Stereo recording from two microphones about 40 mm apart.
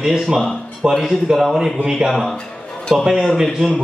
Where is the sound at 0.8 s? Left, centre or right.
Centre.